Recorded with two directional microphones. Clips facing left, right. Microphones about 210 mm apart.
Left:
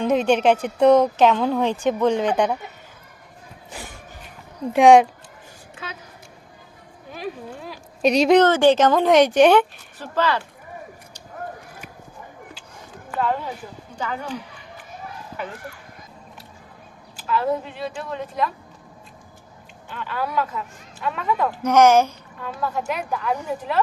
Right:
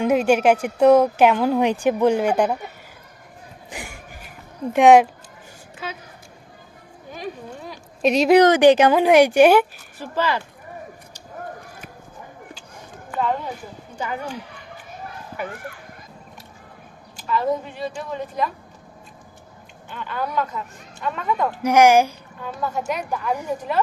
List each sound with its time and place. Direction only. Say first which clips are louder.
0.0 s a woman's voice: right 1 dB; 10° right (ahead or behind)
3.7 s a sound: right 2 dB; 15° right (ahead or behind)
4.7 s speech: even; centre (ahead or behind)
7.1 s speech: left 1 dB; centre (ahead or behind)
8.4 s a woman's voice: right 2 dB; 15° right (ahead or behind)
13.1 s speech: even; centre (ahead or behind)
17.2 s speech: even; centre (ahead or behind)
19.9 s speech: even; centre (ahead or behind)
21.6 s a woman's voice: right 1 dB; 10° right (ahead or behind)
22.4 s speech: even; centre (ahead or behind)